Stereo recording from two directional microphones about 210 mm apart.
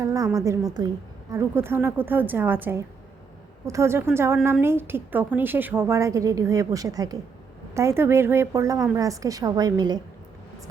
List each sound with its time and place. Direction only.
0.0 s a woman's voice: 15° right (ahead or behind)